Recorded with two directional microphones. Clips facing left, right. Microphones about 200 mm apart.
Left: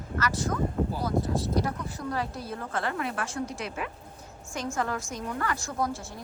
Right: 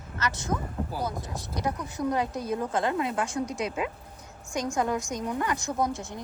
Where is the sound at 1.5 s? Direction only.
20° right (ahead or behind).